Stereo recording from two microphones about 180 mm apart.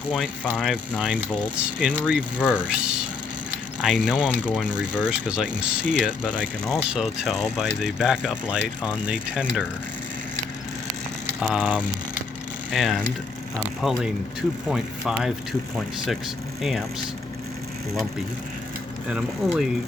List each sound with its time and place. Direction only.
0.1 s speech: centre (ahead or behind)
11.3 s speech: centre (ahead or behind)
16.6 s speech: centre (ahead or behind)
19.1 s speech: 5° right (ahead or behind)